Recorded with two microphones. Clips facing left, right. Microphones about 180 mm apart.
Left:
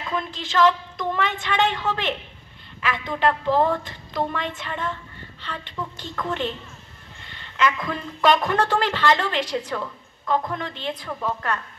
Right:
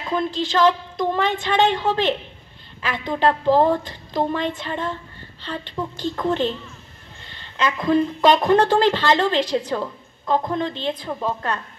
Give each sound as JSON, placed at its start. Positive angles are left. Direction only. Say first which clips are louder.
{"t": 0.0, "sound": "speech", "louder": "right 6 dB", "side_deg": -30}